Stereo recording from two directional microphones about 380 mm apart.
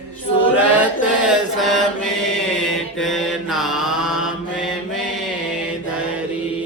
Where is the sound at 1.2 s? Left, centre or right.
Centre.